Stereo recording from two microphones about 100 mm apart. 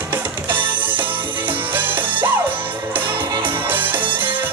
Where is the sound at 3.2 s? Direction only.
55° right (ahead or behind).